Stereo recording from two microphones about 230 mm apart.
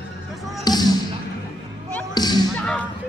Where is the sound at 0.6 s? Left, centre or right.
Centre.